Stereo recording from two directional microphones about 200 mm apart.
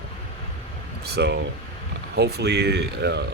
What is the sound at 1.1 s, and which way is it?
Speech, 55° right (ahead or behind).